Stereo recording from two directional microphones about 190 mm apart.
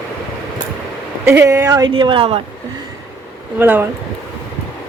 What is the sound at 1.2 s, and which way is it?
Speech, 10° right (ahead or behind).